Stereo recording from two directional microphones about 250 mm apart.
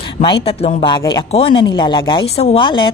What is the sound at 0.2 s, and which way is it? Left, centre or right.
A woman's voice, left.